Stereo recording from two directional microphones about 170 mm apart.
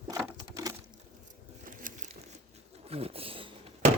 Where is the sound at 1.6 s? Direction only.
50° right (ahead or behind).